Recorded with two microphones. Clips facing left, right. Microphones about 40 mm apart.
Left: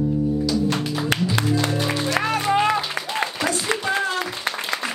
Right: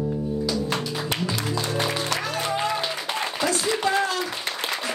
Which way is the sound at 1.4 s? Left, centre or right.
Left.